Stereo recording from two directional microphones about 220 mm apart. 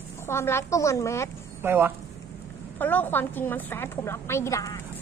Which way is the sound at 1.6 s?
10° right (ahead or behind).